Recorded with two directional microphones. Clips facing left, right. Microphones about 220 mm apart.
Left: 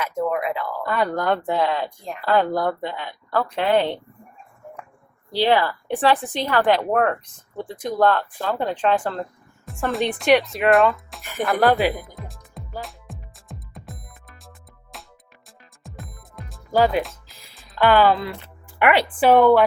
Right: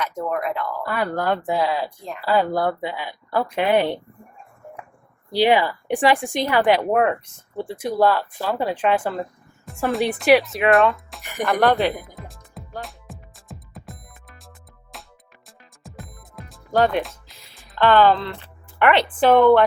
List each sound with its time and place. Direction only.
0.4 s speech: 5° left (ahead or behind)
0.8 s speech: 5° right (ahead or behind)
5.3 s speech: 15° right (ahead or behind)
11.2 s music: 15° right (ahead or behind)
11.4 s speech: centre (ahead or behind)
12.0 s music: centre (ahead or behind)
17.7 s a woman's voice: 10° left (ahead or behind)